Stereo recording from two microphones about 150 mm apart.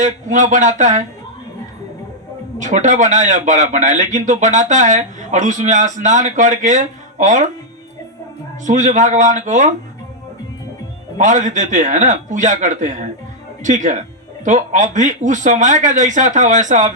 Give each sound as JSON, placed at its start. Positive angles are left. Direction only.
{"t": 0.0, "sound": "a man's voice", "side_deg": -55}
{"t": 2.6, "sound": "a man's voice", "side_deg": -55}
{"t": 8.6, "sound": "a man's voice", "side_deg": -55}
{"t": 11.2, "sound": "a man's voice", "side_deg": -55}